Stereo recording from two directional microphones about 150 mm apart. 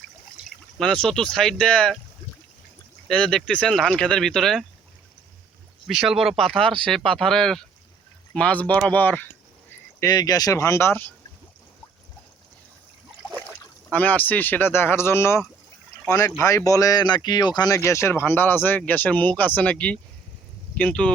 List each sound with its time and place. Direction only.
0.8 s speech: 5° left (ahead or behind)
3.1 s speech: 5° left (ahead or behind)
5.9 s speech: centre (ahead or behind)
10.0 s speech: 25° left (ahead or behind)
13.9 s speech: 10° left (ahead or behind)